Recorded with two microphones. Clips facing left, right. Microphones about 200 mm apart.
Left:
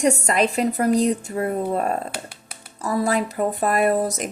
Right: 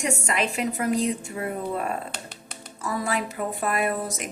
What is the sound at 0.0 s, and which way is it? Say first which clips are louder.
Speech: left 7 dB; 40° left (ahead or behind).